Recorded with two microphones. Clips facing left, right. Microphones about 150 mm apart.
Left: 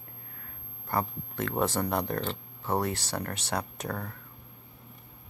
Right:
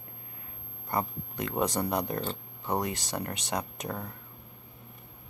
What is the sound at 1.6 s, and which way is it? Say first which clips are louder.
Speech: right 1 dB; 20° right (ahead or behind).